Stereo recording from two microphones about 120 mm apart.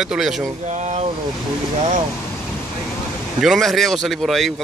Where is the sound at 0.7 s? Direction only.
75° right (ahead or behind).